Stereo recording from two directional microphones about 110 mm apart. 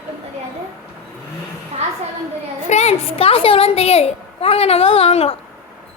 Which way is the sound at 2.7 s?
85° left.